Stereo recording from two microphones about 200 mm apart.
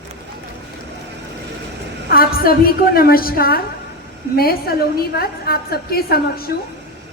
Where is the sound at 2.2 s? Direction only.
45° left (ahead or behind).